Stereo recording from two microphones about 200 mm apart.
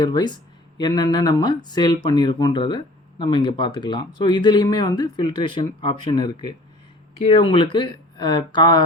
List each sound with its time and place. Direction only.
0.0 s speech: 20° left (ahead or behind)